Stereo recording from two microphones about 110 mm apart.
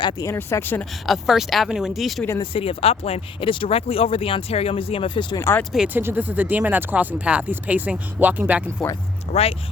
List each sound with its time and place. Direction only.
0.2 s speech: 25° left (ahead or behind)
1.0 s speech: centre (ahead or behind)
2.4 s speech: 55° left (ahead or behind)
5.9 s speech: 20° right (ahead or behind)
9.3 s speech: 65° left (ahead or behind)